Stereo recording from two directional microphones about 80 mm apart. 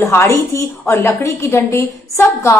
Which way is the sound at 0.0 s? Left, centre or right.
Left.